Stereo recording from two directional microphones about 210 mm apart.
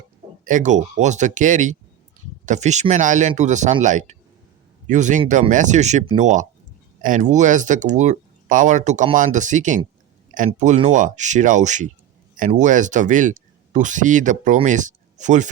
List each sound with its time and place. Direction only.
0.4 s speech: 35° right (ahead or behind)